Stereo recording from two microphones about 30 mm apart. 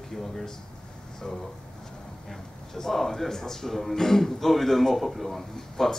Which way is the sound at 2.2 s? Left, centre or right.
Centre.